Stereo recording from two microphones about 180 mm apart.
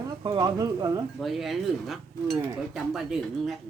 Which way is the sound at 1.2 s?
Centre (ahead or behind).